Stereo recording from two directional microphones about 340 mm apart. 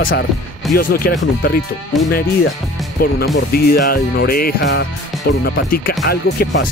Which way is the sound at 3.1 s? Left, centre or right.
Left.